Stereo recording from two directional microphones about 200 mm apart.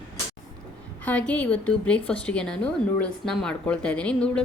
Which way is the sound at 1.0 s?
5° left (ahead or behind).